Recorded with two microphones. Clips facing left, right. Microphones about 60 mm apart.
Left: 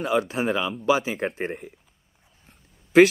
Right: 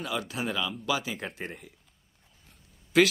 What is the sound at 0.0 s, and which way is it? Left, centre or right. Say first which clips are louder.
Speech: left 10 dB; left.